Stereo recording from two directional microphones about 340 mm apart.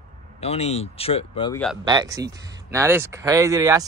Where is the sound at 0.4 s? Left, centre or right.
Centre.